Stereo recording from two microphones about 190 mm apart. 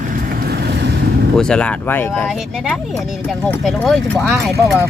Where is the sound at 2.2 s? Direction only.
Centre (ahead or behind).